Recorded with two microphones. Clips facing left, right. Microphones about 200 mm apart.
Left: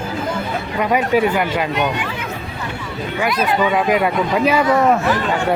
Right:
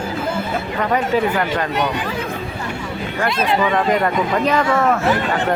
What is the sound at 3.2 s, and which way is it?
Speech, 25° right (ahead or behind).